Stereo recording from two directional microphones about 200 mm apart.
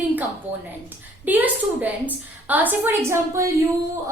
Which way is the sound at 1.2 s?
10° right (ahead or behind).